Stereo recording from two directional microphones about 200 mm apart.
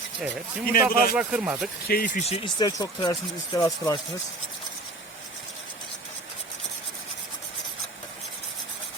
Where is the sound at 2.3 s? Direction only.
25° left (ahead or behind).